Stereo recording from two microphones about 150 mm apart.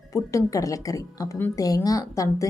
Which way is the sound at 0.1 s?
20° left (ahead or behind).